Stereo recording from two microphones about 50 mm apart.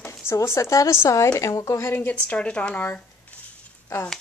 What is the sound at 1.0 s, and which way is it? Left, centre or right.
Speech, left.